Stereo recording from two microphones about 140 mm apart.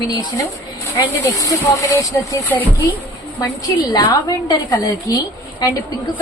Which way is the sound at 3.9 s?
25° left (ahead or behind).